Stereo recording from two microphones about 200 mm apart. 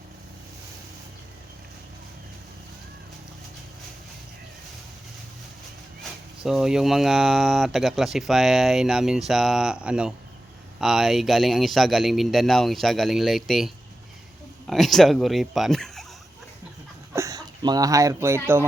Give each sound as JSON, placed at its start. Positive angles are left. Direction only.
{"t": 6.0, "sound": "speech", "side_deg": 0}
{"t": 17.2, "sound": "speech", "side_deg": -20}